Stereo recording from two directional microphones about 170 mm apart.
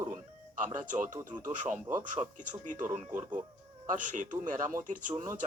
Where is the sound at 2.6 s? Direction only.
50° right (ahead or behind).